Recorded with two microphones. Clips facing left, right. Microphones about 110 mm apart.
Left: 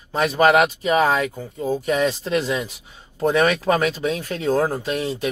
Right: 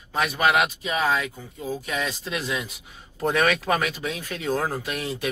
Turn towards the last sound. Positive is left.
turn(degrees=25)  # may be behind; listen again after turning